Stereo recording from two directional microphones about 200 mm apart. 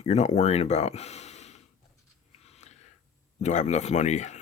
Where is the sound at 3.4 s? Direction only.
35° left (ahead or behind).